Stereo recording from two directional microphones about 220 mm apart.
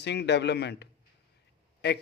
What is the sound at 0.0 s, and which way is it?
Speech, 50° left (ahead or behind).